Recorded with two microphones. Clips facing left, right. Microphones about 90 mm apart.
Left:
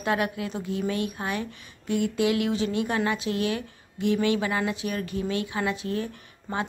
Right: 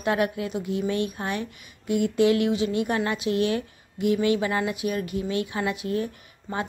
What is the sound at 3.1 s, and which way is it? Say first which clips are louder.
Speech: right 3 dB; 20° right (ahead or behind).